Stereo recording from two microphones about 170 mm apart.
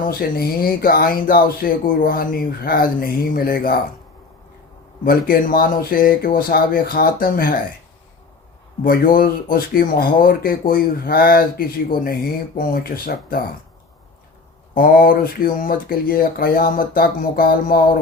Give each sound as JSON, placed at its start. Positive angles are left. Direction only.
{"t": 0.0, "sound": "speech", "side_deg": 60}
{"t": 5.0, "sound": "speech", "side_deg": 60}
{"t": 8.8, "sound": "speech", "side_deg": 55}
{"t": 14.8, "sound": "speech", "side_deg": 60}